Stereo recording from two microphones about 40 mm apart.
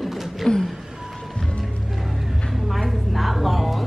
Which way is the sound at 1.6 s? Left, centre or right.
Centre.